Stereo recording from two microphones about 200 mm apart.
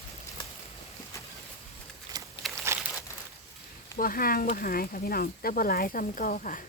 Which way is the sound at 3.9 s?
45° left (ahead or behind).